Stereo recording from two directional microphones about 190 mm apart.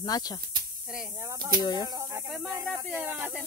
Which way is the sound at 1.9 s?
15° right (ahead or behind).